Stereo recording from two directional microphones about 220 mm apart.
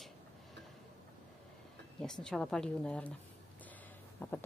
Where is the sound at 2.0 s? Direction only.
5° left (ahead or behind).